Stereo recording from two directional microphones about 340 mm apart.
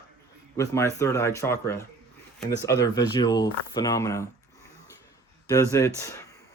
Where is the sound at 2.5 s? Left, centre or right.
Left.